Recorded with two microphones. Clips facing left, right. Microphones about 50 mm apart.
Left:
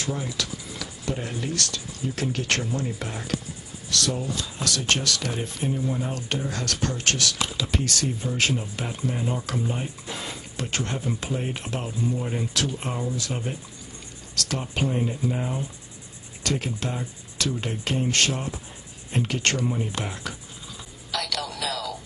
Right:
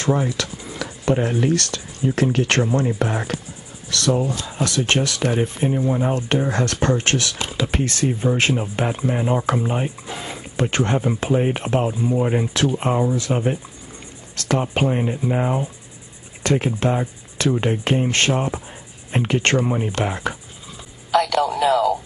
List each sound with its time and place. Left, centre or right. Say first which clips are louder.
0.0 s speech: right 9 dB; right
4.4 s speech: right 6 dB; right
10.0 s speech: right 4 dB; centre
10.5 s speech: right 10 dB; right
21.1 s a sound: right 13 dB; right